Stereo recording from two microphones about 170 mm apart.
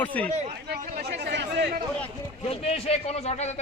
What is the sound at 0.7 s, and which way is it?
Chatter, 70° right (ahead or behind).